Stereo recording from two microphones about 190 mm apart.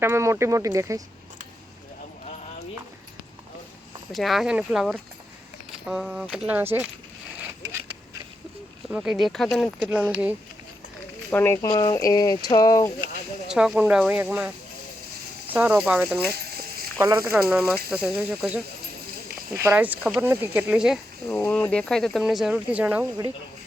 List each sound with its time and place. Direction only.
0.0 s speech: 15° right (ahead or behind)
4.1 s speech: centre (ahead or behind)
8.9 s speech: centre (ahead or behind)
11.3 s speech: 10° left (ahead or behind)
13.5 s speech: 5° right (ahead or behind)
15.5 s speech: 10° right (ahead or behind)
16.3 s a sound: 55° right (ahead or behind)
17.0 s speech: 15° right (ahead or behind)
17.3 s speech: 5° right (ahead or behind)